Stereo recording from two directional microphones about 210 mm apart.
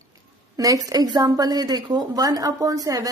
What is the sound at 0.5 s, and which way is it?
A woman's voice, 15° right (ahead or behind).